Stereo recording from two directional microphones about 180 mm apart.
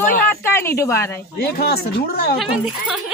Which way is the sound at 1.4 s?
60° left (ahead or behind).